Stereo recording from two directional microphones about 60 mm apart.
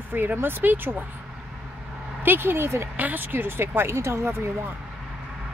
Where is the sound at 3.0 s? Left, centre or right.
Right.